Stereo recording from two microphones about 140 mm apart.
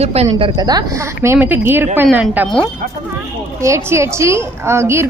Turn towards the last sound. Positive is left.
turn(degrees=-20)  # may be behind; listen again after turning